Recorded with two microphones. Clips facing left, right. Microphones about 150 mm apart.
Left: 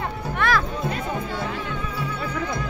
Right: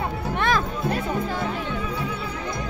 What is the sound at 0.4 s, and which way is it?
Music, 20° right (ahead or behind).